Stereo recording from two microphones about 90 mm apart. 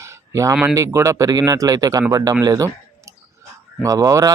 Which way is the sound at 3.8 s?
40° right (ahead or behind).